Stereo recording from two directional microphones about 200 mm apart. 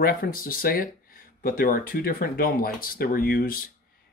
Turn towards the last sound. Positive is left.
turn(degrees=50)  # may be behind; listen again after turning